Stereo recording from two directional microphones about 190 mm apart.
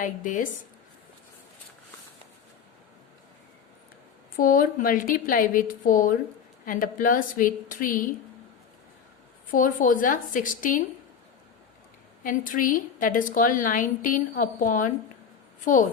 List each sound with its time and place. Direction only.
0.0 s a woman's voice: 45° left (ahead or behind)
4.4 s a woman's voice: 45° left (ahead or behind)
9.5 s a woman's voice: 45° left (ahead or behind)
12.2 s a woman's voice: 45° left (ahead or behind)